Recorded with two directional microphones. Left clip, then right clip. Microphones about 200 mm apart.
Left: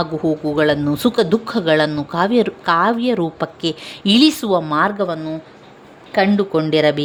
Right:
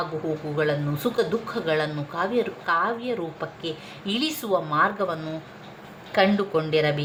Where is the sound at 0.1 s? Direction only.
45° left (ahead or behind).